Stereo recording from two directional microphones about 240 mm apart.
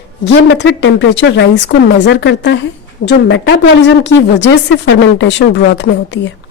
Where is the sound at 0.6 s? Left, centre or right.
Left.